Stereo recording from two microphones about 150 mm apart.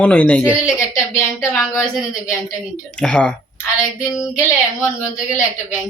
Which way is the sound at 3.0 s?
5° left (ahead or behind).